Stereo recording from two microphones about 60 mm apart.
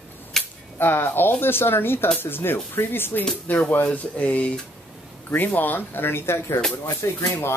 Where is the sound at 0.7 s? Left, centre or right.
Left.